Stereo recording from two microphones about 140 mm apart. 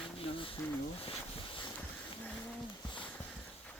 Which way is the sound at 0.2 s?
40° left (ahead or behind).